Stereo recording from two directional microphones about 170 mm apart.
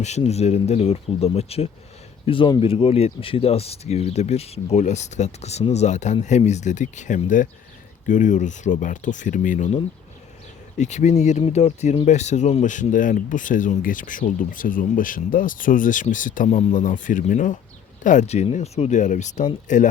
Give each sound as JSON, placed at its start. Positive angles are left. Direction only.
{"t": 0.0, "sound": "speech", "side_deg": 40}